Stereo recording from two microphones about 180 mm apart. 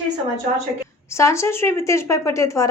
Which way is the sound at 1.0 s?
15° left (ahead or behind).